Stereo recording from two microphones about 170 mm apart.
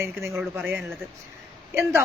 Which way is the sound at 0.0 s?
15° right (ahead or behind).